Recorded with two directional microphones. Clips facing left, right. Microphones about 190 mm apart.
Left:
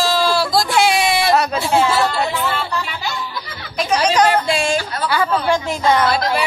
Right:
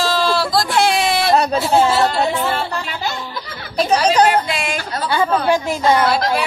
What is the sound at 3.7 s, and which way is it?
Speech, 35° right (ahead or behind).